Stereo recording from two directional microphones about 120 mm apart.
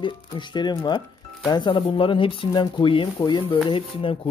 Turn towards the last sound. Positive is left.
turn(degrees=50)  # may be behind; listen again after turning